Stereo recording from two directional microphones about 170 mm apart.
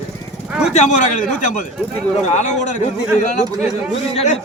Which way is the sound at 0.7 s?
45° left (ahead or behind).